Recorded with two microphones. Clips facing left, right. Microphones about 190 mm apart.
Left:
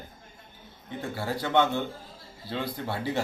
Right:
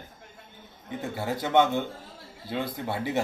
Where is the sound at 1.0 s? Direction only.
20° right (ahead or behind).